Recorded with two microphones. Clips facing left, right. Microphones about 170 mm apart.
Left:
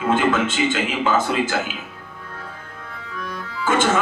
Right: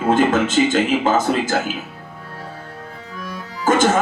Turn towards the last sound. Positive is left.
turn(degrees=-45)  # may be behind; listen again after turning